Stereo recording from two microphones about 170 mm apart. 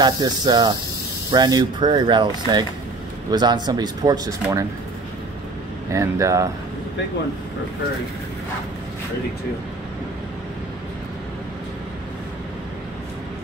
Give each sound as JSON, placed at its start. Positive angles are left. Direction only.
{"t": 0.0, "sound": "speech", "side_deg": -25}
{"t": 5.9, "sound": "speech", "side_deg": -15}